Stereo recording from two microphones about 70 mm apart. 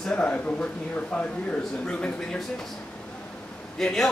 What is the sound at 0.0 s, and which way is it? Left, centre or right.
Speech, centre.